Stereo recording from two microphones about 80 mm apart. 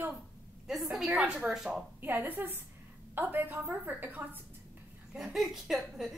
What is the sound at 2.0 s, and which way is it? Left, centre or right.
A woman's voice, right.